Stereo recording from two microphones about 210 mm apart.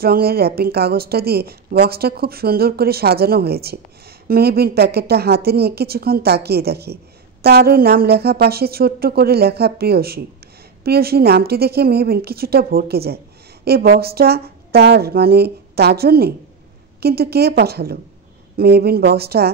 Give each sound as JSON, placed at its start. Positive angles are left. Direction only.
{"t": 0.0, "sound": "a woman's voice", "side_deg": -45}